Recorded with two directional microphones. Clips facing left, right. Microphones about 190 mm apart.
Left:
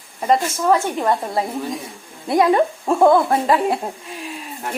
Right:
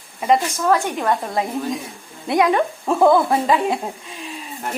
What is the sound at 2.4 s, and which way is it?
Speech, 20° left (ahead or behind).